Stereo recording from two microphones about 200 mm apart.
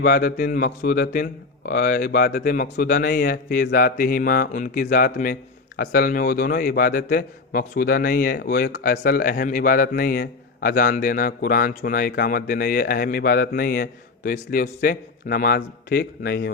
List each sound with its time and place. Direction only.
0.0 s a man's voice: 50° left (ahead or behind)